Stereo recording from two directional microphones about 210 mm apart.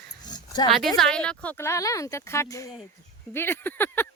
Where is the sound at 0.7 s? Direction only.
Centre (ahead or behind).